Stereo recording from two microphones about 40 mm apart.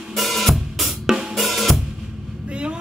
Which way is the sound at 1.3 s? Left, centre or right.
Centre.